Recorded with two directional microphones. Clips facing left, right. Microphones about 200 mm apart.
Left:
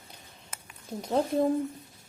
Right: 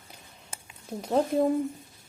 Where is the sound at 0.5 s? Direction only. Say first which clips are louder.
Right 2 dB; 30° right (ahead or behind).